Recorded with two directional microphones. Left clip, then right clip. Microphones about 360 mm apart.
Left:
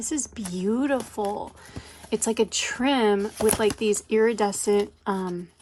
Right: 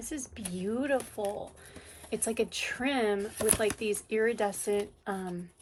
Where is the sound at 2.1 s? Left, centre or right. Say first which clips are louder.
Left 7 dB; centre.